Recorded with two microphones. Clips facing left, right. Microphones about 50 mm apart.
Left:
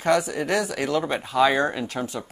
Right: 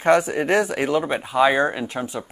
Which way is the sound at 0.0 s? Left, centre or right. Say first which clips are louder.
Right 4 dB; right.